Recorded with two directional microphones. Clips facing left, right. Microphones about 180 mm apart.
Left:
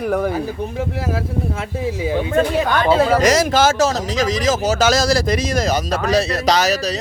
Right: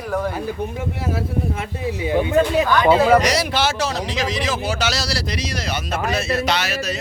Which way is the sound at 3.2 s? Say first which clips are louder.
Left 5 dB; 45° left (ahead or behind).